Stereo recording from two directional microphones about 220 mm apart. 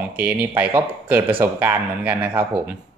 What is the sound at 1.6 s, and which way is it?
Speech, 10° right (ahead or behind).